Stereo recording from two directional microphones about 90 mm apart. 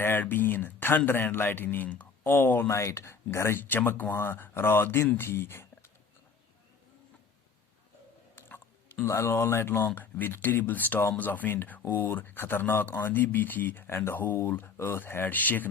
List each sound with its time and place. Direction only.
0.0 s speech: 25° left (ahead or behind)
8.4 s speech: 25° left (ahead or behind)